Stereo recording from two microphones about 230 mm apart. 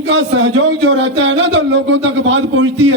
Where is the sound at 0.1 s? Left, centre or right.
Right.